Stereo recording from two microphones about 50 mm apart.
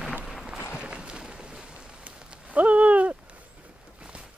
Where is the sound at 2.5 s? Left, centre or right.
Right.